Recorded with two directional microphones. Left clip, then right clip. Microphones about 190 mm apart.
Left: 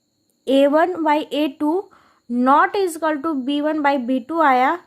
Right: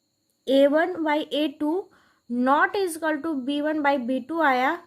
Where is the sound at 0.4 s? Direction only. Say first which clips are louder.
Left 4 dB; 20° left (ahead or behind).